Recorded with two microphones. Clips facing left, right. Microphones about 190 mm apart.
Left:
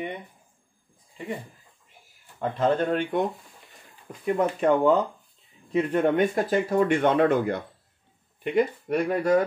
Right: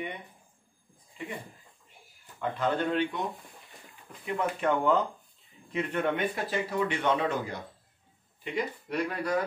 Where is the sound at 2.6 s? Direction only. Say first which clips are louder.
Left 5 dB; 45° left (ahead or behind).